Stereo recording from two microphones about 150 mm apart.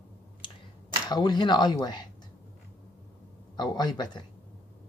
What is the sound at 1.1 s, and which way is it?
Speech, 30° left (ahead or behind).